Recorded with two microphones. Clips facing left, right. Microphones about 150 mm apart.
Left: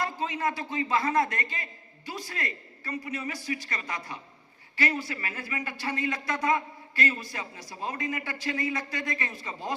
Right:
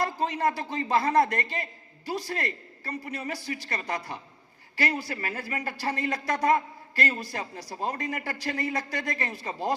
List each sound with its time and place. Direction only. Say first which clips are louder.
0.0 s speech: right 3 dB; 35° right (ahead or behind)